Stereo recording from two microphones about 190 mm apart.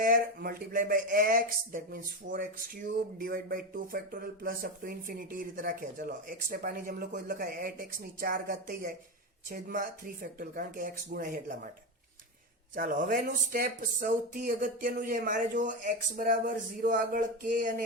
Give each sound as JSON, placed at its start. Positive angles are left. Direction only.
{"t": 0.0, "sound": "speech", "side_deg": -50}
{"t": 12.7, "sound": "speech", "side_deg": -45}